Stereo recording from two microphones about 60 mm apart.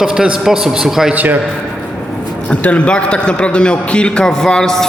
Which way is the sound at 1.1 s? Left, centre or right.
Right.